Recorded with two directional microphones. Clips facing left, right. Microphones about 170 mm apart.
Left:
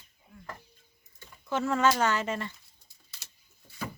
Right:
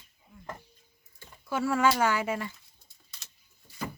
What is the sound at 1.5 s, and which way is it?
Speech, 10° right (ahead or behind).